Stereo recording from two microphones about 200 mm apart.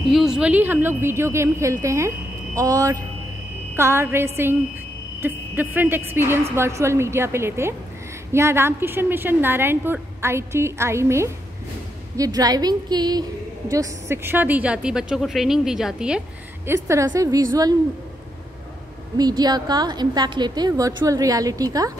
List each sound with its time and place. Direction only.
0.1 s a woman's voice: centre (ahead or behind)
16.6 s a woman's voice: 15° right (ahead or behind)
19.1 s a woman's voice: 20° right (ahead or behind)